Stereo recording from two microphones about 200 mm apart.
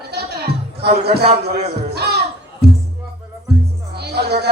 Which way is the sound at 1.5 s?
50° right (ahead or behind).